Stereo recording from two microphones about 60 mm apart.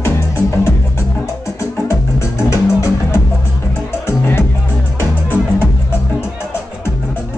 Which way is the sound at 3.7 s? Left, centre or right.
Left.